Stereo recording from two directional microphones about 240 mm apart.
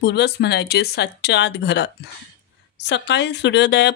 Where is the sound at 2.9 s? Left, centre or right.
Left.